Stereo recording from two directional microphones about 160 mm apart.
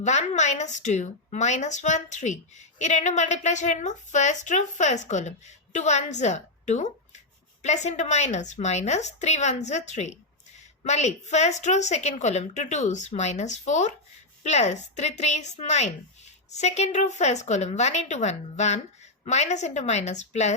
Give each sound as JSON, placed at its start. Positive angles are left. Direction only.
{"t": 0.0, "sound": "a woman's voice", "side_deg": 45}